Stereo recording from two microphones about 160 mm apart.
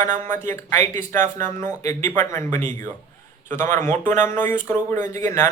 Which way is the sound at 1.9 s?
15° left (ahead or behind).